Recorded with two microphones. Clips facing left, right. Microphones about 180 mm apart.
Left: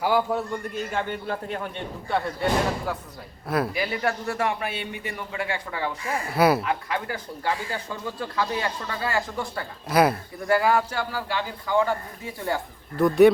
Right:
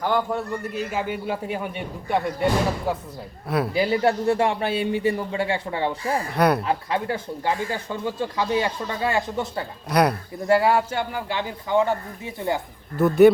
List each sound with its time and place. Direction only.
0.0 s a man's voice: 5° left (ahead or behind); by 2.9 s 15° right (ahead or behind)
3.4 s speech: centre (ahead or behind)
3.8 s speech: 30° right (ahead or behind)
6.3 s speech: 5° left (ahead or behind)
6.7 s speech: 30° right (ahead or behind)
9.9 s speech: 5° left (ahead or behind)
10.4 s speech: 25° right (ahead or behind)
13.0 s speech: centre (ahead or behind)